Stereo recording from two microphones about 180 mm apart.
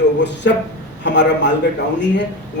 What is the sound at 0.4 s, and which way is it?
Speech, 70° left (ahead or behind).